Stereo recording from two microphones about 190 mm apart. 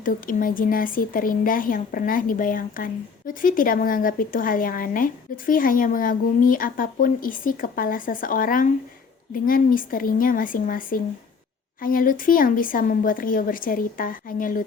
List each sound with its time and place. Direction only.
0.0 s speech: 45° left (ahead or behind)